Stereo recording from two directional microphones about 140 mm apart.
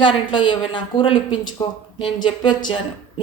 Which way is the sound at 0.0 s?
35° left (ahead or behind).